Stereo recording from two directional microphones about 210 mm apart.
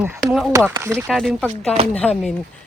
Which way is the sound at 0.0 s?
10° right (ahead or behind).